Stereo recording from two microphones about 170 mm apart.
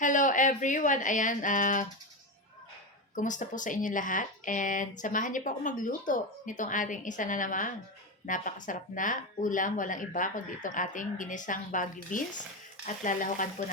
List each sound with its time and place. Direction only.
0.0 s speech: 45° left (ahead or behind)
3.2 s speech: 50° left (ahead or behind)